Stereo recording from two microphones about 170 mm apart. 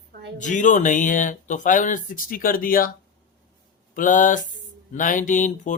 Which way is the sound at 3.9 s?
50° left (ahead or behind).